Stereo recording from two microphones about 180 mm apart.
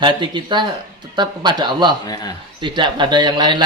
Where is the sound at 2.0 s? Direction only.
20° left (ahead or behind).